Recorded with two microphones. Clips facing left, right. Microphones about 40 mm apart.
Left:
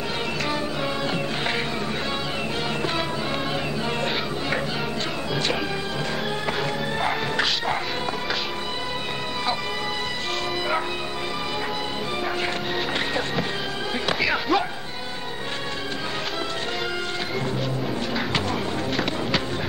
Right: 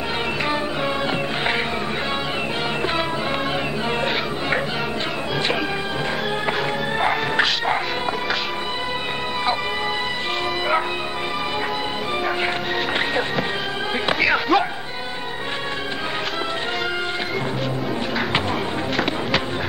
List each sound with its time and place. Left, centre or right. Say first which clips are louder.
7.0 s music: right 5 dB; right
14.2 s music: right 5 dB; centre